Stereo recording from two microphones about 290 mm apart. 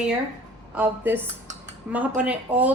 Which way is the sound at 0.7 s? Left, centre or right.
Centre.